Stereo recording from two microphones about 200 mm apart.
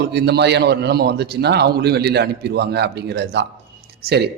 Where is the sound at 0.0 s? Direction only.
55° right (ahead or behind).